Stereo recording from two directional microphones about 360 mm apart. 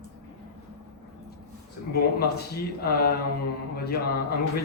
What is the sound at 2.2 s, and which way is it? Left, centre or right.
A man's voice, left.